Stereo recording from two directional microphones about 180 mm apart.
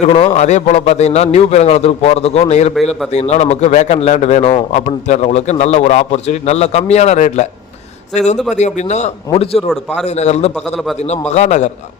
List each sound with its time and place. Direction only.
0.1 s a man's voice: 35° left (ahead or behind)
8.5 s a man's voice: 40° left (ahead or behind)